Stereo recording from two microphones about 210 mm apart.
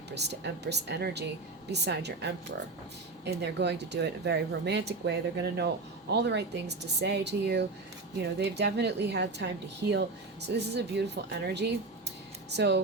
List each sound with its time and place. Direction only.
0.1 s speech: 55° right (ahead or behind)